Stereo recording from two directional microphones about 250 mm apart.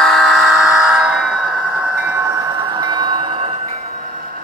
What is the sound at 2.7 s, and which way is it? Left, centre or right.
Train, centre.